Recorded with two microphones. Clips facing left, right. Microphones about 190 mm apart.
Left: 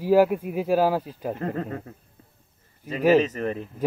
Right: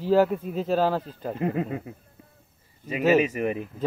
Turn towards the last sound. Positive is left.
turn(degrees=-10)  # may be behind; listen again after turning